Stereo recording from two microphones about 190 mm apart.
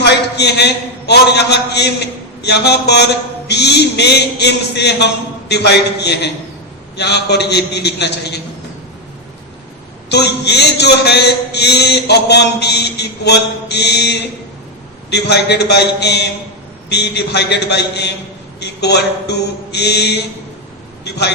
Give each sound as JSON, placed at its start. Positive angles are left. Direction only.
{"t": 0.0, "sound": "a man's voice", "side_deg": 60}
{"t": 10.1, "sound": "a man's voice", "side_deg": 60}